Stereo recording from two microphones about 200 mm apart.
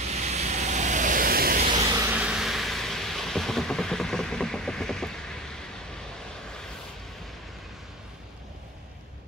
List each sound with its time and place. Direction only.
0.0 s vehicle: 35° right (ahead or behind)
1.6 s vehicle: 35° right (ahead or behind)
1.9 s vehicle: 15° right (ahead or behind); by 5.6 s 5° left (ahead or behind)